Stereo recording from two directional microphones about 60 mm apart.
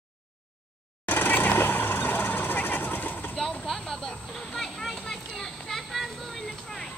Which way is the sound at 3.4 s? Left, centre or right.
Centre.